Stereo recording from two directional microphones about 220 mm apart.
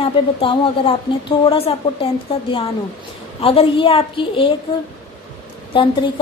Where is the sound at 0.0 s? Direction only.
25° left (ahead or behind).